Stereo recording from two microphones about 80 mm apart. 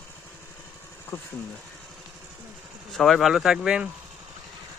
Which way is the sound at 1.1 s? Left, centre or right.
Left.